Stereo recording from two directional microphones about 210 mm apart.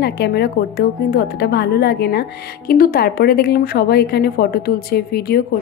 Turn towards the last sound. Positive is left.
turn(degrees=50)  # may be behind; listen again after turning